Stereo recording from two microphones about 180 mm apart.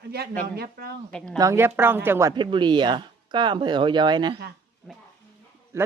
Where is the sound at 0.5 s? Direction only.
60° right (ahead or behind).